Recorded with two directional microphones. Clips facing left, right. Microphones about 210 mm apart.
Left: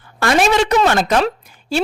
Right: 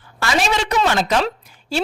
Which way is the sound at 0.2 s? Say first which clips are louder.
Left 6 dB; 50° left (ahead or behind).